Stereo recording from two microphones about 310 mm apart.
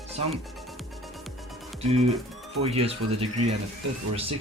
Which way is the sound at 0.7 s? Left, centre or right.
Centre.